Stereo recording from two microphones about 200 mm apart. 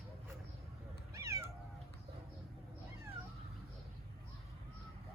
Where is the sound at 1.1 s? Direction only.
15° right (ahead or behind).